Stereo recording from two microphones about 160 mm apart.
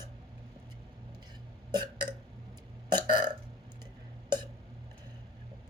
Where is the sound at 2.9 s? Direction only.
30° right (ahead or behind).